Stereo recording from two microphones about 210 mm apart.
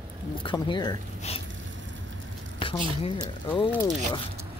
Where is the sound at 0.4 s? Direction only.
25° left (ahead or behind).